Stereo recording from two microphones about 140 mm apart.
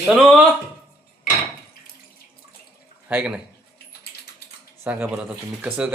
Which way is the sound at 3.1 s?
10° right (ahead or behind).